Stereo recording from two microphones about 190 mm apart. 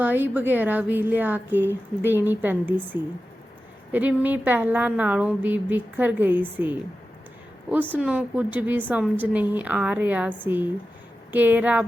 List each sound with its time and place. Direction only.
0.0 s a woman's voice: 10° right (ahead or behind)
7.9 s a woman's voice: 5° right (ahead or behind)